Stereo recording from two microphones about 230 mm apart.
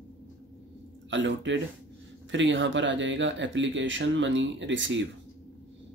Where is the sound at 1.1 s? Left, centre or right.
Right.